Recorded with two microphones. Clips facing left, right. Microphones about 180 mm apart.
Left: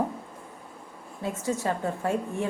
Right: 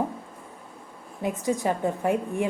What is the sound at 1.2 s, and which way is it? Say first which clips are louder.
Speech: right 3 dB; 15° right (ahead or behind).